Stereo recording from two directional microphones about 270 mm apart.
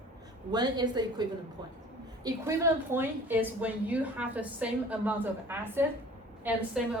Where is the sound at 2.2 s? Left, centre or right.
Centre.